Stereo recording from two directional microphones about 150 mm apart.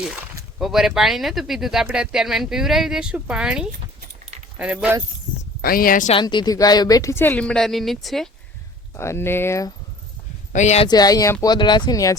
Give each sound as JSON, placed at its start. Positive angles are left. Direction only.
{"t": 0.6, "sound": "speech", "side_deg": 0}
{"t": 5.6, "sound": "speech", "side_deg": 75}
{"t": 6.1, "sound": "speech", "side_deg": 30}
{"t": 9.0, "sound": "speech", "side_deg": 15}
{"t": 10.5, "sound": "speech", "side_deg": 50}
{"t": 10.8, "sound": "speech", "side_deg": 25}